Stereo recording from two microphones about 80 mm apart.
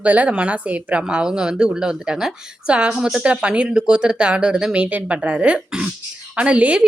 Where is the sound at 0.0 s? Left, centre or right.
Centre.